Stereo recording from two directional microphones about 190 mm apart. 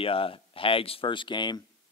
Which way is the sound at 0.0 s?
30° left (ahead or behind).